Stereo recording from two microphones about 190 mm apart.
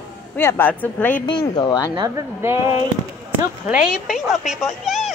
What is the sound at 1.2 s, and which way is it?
Speech, 25° left (ahead or behind).